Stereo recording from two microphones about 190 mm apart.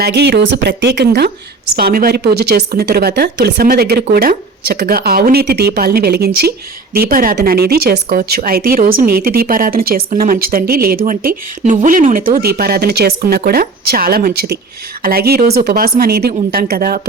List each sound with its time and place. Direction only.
0.0 s a woman's voice: 60° right (ahead or behind)